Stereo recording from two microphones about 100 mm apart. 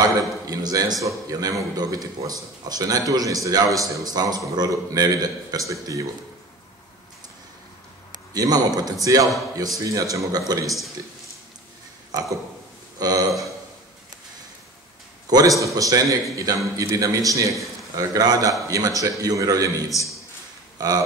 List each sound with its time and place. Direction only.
0.0 s a man's voice: 40° right (ahead or behind)
8.3 s a man's voice: 40° right (ahead or behind)
13.0 s a man's voice: 40° right (ahead or behind)
15.2 s a man's voice: 40° right (ahead or behind)
20.7 s speech: 40° right (ahead or behind)